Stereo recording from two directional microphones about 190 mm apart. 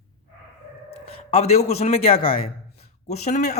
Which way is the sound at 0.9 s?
30° left (ahead or behind).